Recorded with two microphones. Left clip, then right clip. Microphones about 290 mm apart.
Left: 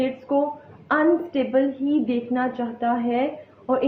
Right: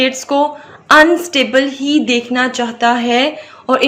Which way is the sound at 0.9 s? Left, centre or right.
Right.